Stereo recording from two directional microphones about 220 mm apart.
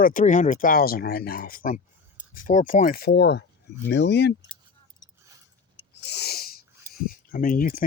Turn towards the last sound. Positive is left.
turn(degrees=40)  # may be behind; listen again after turning